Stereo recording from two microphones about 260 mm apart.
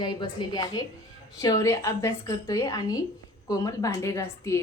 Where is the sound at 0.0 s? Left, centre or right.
Centre.